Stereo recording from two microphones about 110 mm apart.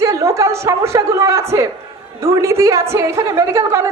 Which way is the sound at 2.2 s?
25° right (ahead or behind).